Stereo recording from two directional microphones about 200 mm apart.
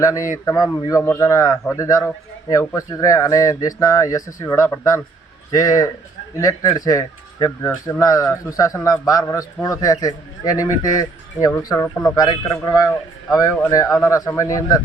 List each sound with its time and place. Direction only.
0.0 s a man's voice: 15° left (ahead or behind)